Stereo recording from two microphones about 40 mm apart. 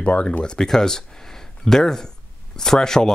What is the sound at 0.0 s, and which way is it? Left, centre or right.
Speech, left.